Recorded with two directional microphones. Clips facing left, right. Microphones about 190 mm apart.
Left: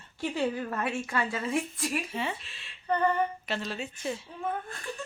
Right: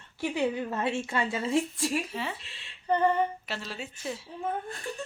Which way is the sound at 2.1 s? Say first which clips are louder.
Left 2 dB; centre (ahead or behind).